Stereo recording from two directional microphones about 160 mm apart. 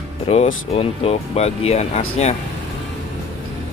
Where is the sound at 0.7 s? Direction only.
40° left (ahead or behind).